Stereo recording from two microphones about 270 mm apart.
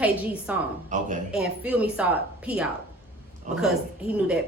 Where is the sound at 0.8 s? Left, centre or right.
Right.